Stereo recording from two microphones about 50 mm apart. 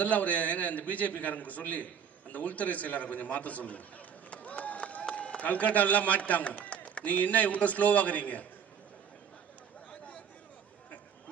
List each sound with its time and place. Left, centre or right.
0.0 s a man's voice: left